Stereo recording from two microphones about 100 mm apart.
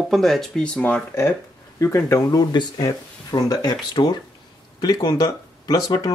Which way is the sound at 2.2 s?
45° left (ahead or behind).